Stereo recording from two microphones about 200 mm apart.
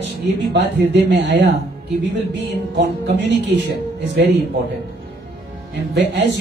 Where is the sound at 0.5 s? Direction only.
60° right (ahead or behind).